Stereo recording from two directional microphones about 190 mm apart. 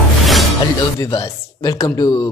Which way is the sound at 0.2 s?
Centre (ahead or behind).